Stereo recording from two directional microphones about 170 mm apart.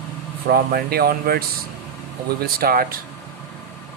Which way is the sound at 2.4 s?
60° right (ahead or behind).